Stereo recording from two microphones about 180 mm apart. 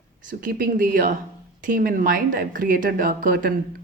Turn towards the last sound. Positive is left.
turn(degrees=-55)  # may be behind; listen again after turning